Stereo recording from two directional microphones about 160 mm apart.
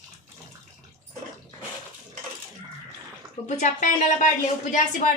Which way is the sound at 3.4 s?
50° left (ahead or behind).